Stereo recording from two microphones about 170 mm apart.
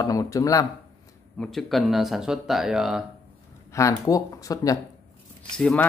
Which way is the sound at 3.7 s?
20° left (ahead or behind).